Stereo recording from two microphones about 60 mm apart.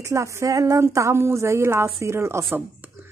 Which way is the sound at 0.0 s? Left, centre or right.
Right.